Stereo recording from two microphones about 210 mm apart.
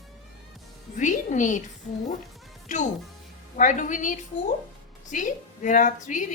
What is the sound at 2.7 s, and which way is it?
A woman's voice, 35° left (ahead or behind).